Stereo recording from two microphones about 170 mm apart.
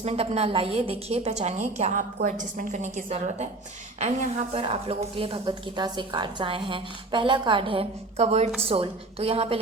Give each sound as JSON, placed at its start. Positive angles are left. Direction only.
{"t": 0.0, "sound": "a woman's voice", "side_deg": -40}